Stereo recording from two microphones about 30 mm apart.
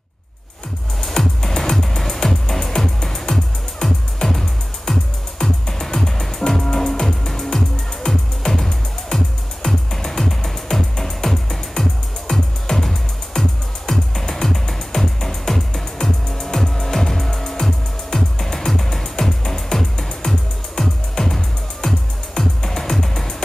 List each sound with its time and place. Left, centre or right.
1.0 s music: centre
12.7 s music: left
13.4 s music: centre